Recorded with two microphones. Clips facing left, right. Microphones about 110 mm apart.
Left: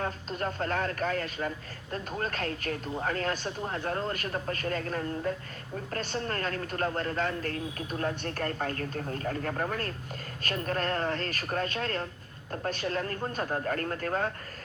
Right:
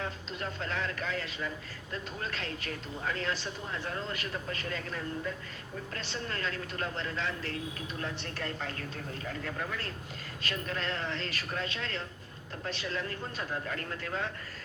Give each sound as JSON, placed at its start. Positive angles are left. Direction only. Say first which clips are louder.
{"t": 0.0, "sound": "speech", "louder": "left 5 dB", "side_deg": 45}